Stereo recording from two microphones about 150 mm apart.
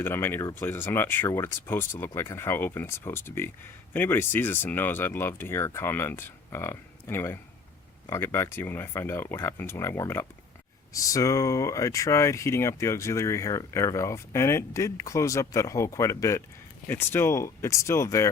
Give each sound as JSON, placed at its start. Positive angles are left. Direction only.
{"t": 0.0, "sound": "speech", "side_deg": 15}